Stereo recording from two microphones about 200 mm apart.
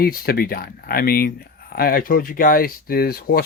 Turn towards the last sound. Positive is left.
turn(degrees=50)  # may be behind; listen again after turning